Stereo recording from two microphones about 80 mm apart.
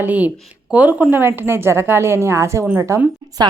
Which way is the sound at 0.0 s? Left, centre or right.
Centre.